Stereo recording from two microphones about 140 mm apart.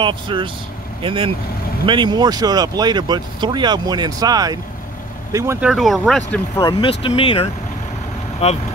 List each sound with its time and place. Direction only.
0.0 s speech: 35° right (ahead or behind)
5.6 s speech: centre (ahead or behind)
6.5 s speech: 30° left (ahead or behind)
8.4 s speech: 50° left (ahead or behind)